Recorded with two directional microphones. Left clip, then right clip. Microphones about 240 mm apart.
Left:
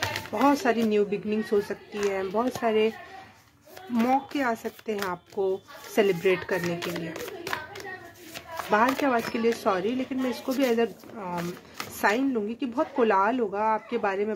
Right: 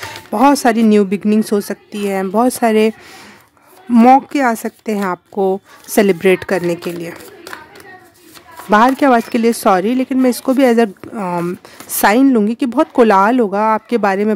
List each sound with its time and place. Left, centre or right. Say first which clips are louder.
0.3 s speech: right 12 dB; right
3.9 s speech: right 16 dB; right
8.6 s speech: right 13 dB; right